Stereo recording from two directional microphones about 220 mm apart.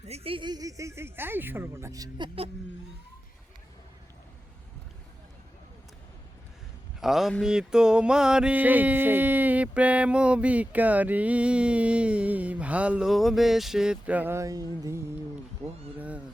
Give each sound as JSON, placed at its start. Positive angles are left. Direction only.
{"t": 0.1, "sound": "speech", "side_deg": -25}
{"t": 7.0, "sound": "mantra", "side_deg": 0}
{"t": 15.6, "sound": "speech", "side_deg": -25}
{"t": 16.0, "sound": "speech", "side_deg": -5}